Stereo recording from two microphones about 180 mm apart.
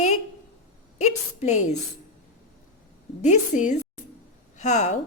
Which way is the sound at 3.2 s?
40° left (ahead or behind).